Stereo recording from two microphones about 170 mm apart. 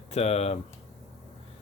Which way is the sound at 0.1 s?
35° left (ahead or behind).